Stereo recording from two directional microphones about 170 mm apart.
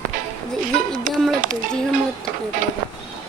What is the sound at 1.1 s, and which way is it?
Speech, 50° right (ahead or behind).